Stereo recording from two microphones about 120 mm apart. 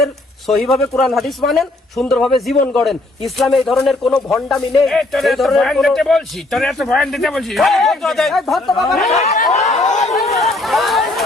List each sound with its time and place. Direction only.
0.0 s speech: centre (ahead or behind)
9.6 s chatter: 75° left (ahead or behind)
10.2 s speech: centre (ahead or behind)